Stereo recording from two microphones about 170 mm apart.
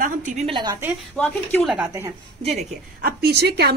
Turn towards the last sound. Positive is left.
turn(degrees=-75)  # may be behind; listen again after turning